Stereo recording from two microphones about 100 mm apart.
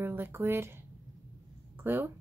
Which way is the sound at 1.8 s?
20° right (ahead or behind).